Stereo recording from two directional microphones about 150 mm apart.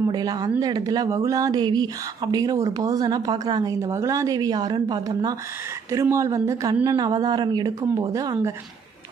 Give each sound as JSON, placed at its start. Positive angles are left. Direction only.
{"t": 0.1, "sound": "speech", "side_deg": -25}